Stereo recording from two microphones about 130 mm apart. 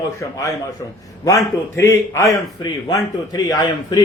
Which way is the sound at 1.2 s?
25° left (ahead or behind).